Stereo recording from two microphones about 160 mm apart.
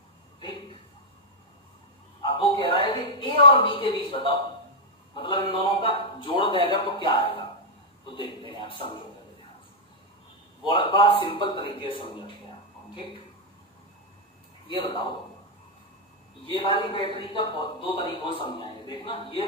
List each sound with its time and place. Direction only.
2.2 s a sound: 30° left (ahead or behind)
5.1 s a man's voice: 30° left (ahead or behind)
8.1 s a sound: 30° left (ahead or behind)
10.6 s a man's voice: 30° left (ahead or behind)
14.7 s a man's voice: 30° left (ahead or behind)
16.4 s a man's voice: 35° left (ahead or behind)